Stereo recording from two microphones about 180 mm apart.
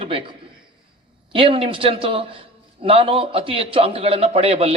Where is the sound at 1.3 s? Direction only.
30° right (ahead or behind).